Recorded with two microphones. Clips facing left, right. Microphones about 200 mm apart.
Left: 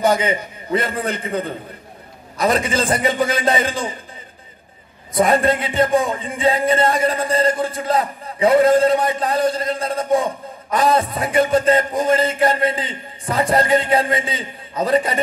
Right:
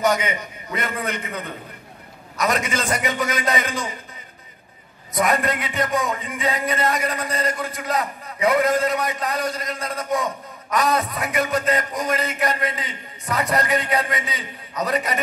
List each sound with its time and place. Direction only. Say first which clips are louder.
0.0 s speech: left 4 dB; 30° left (ahead or behind)
5.1 s speech: left 5 dB; 30° left (ahead or behind)